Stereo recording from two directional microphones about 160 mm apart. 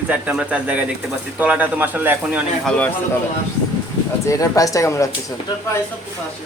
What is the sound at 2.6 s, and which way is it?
Speech, 10° left (ahead or behind).